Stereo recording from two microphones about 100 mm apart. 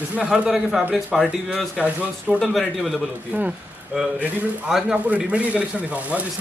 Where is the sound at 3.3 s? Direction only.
10° right (ahead or behind).